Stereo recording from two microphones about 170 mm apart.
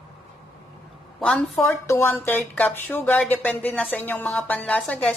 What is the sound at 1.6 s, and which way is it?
Speech, 15° left (ahead or behind).